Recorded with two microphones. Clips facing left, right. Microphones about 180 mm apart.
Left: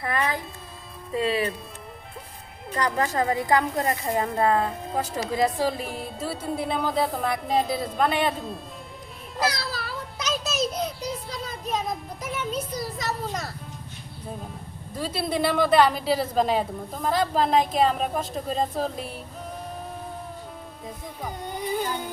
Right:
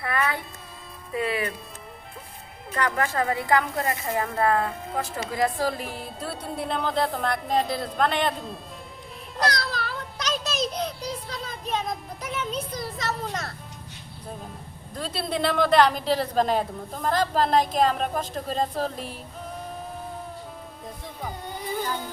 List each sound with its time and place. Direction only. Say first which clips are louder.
0.0 s speech: even; 25° left (ahead or behind)
2.8 s speech: left 1 dB; 20° left (ahead or behind)
5.6 s a woman's voice: left 1 dB; centre (ahead or behind)
9.4 s a sound: right 1 dB; 5° left (ahead or behind)
14.9 s a woman's voice: left 2 dB; 5° left (ahead or behind)
20.8 s a woman's voice: left 1 dB; centre (ahead or behind)
21.5 s speech: left 2 dB; 15° left (ahead or behind)